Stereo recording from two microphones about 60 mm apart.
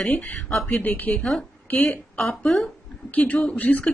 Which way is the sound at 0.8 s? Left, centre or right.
Left.